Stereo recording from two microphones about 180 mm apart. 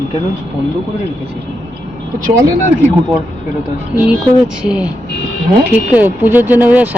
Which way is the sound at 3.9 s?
5° right (ahead or behind).